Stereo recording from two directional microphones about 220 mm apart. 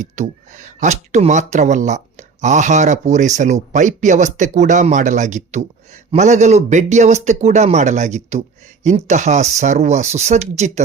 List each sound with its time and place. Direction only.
0.0 s speech: 35° right (ahead or behind)